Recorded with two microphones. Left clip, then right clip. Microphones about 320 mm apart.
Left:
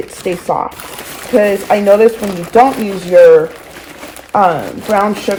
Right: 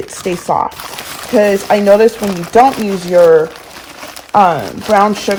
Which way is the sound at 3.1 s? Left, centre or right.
Right.